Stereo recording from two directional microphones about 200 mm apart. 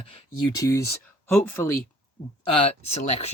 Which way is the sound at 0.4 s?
15° left (ahead or behind).